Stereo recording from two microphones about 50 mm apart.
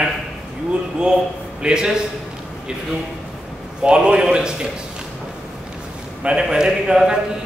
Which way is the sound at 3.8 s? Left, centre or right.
Centre.